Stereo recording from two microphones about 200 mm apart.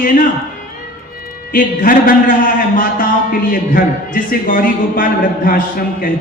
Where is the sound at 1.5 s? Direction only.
45° left (ahead or behind).